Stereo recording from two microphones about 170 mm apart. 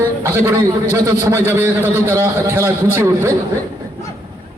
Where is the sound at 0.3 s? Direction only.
15° right (ahead or behind).